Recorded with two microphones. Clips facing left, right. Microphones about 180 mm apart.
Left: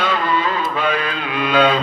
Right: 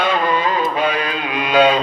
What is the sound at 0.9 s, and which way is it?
Mantra, 15° right (ahead or behind).